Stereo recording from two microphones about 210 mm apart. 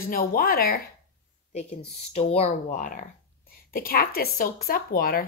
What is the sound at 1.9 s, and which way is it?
Speech, 30° left (ahead or behind).